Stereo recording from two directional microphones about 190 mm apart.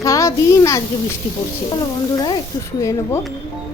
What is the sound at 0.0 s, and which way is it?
Speech, 15° left (ahead or behind).